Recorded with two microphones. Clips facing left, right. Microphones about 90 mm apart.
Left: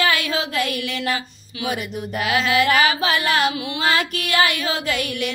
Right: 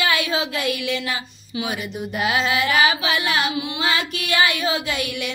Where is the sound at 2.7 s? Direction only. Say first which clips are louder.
Left 1 dB; 45° left (ahead or behind).